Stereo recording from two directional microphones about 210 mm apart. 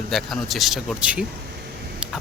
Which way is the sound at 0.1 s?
Centre (ahead or behind).